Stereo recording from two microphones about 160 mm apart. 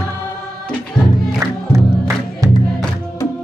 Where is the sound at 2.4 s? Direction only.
20° right (ahead or behind).